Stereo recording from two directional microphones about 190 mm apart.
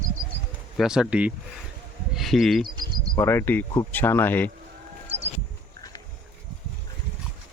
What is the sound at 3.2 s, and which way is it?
Speech, 10° left (ahead or behind).